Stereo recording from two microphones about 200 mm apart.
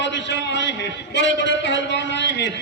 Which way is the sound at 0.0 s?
60° left (ahead or behind).